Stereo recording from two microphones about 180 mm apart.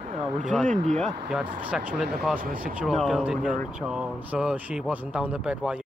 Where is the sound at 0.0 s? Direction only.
30° right (ahead or behind).